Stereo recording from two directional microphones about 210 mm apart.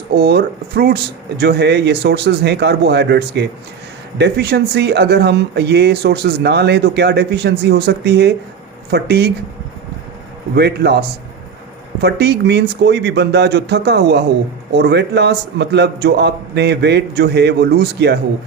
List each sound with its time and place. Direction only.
0.1 s speech: 50° right (ahead or behind)
10.5 s speech: 50° right (ahead or behind)
12.0 s speech: 50° right (ahead or behind)